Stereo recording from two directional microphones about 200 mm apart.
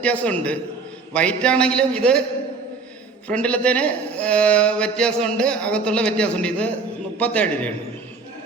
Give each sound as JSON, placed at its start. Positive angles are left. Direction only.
{"t": 0.0, "sound": "a man's voice", "side_deg": 5}
{"t": 3.2, "sound": "a man's voice", "side_deg": 5}